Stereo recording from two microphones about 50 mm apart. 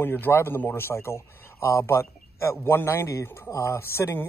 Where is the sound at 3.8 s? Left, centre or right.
Left.